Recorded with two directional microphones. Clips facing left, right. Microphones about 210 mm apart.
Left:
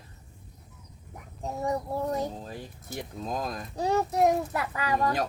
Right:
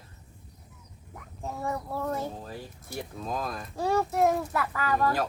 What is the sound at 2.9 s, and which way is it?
Speech, 20° left (ahead or behind).